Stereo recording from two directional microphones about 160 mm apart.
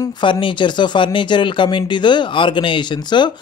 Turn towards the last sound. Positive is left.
turn(degrees=30)  # may be behind; listen again after turning